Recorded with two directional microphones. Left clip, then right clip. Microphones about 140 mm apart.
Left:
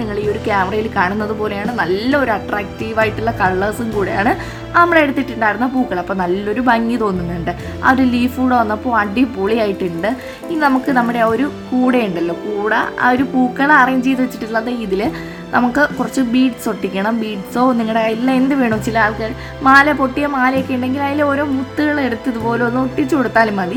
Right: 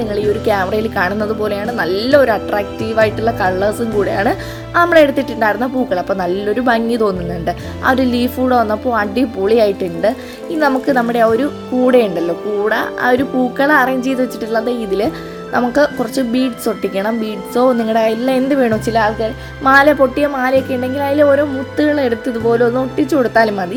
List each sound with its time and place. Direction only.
0.1 s a woman's voice: 25° right (ahead or behind)